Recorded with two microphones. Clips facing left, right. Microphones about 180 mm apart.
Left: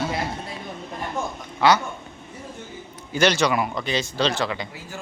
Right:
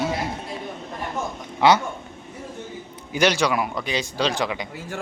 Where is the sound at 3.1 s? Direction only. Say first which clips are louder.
Even; 10° right (ahead or behind).